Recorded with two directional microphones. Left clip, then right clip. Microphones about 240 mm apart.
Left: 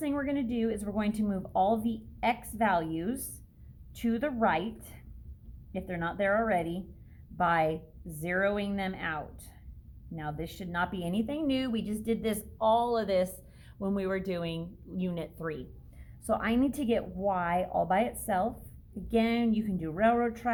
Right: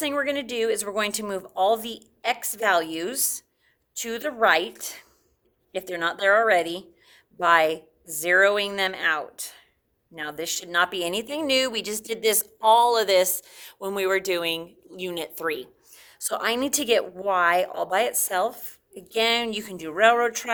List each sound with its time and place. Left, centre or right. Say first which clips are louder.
0.0 s a woman's voice: right 7 dB; right